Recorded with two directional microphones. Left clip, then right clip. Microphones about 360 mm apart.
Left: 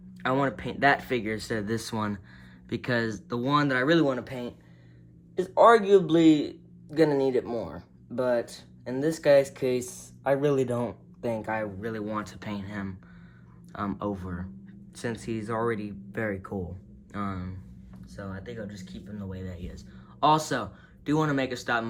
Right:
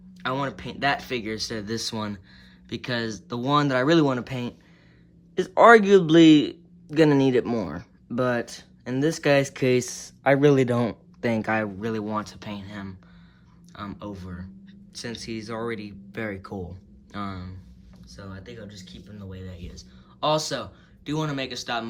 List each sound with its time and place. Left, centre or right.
0.2 s speech: centre